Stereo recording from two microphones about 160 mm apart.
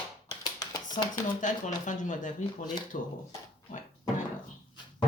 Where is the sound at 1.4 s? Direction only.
50° left (ahead or behind).